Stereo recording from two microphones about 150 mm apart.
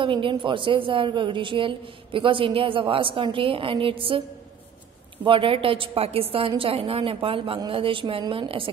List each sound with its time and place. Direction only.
0.0 s a woman's voice: 35° right (ahead or behind)
5.2 s a woman's voice: 35° right (ahead or behind)